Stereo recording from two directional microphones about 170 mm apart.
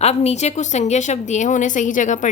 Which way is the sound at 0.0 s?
40° left (ahead or behind).